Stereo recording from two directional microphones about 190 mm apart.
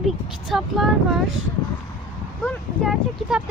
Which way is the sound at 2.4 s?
5° left (ahead or behind).